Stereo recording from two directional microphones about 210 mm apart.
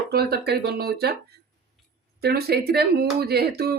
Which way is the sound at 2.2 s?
50° right (ahead or behind).